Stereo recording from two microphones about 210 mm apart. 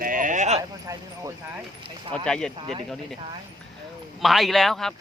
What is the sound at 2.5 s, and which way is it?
Speech, 25° right (ahead or behind).